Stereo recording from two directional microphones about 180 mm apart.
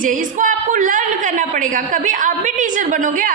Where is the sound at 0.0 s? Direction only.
45° right (ahead or behind).